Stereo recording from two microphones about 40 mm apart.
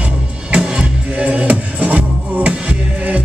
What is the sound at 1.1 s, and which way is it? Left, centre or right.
Music, right.